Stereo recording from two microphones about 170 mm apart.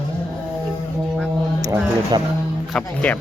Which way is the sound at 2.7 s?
10° left (ahead or behind).